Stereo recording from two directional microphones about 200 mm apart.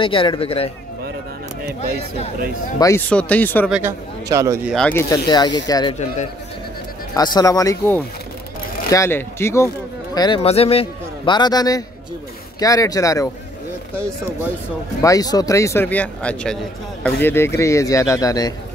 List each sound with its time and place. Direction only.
0.0 s a man's voice: 25° left (ahead or behind)
3.1 s speech: 5° left (ahead or behind)
3.7 s a man's voice: 15° right (ahead or behind)
4.7 s speech: 10° left (ahead or behind)
5.3 s a man's voice: 20° left (ahead or behind)
7.2 s a man's voice: 20° left (ahead or behind)
15.0 s speech: 15° left (ahead or behind)